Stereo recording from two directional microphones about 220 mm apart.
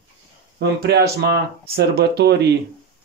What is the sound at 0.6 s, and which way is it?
Speech, 45° right (ahead or behind).